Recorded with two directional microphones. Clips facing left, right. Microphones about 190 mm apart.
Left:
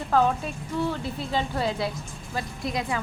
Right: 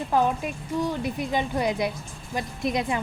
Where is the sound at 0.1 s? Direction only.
15° right (ahead or behind).